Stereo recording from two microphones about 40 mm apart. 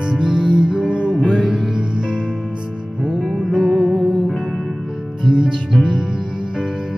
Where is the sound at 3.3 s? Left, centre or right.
Centre.